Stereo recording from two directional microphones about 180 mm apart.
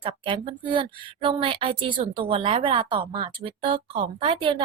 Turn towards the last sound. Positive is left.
turn(degrees=-30)  # may be behind; listen again after turning